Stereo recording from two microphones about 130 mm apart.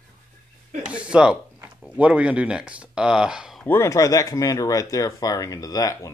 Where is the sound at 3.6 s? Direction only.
20° left (ahead or behind).